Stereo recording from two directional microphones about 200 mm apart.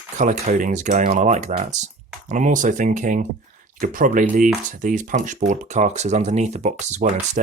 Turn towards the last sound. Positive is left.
turn(degrees=-35)  # may be behind; listen again after turning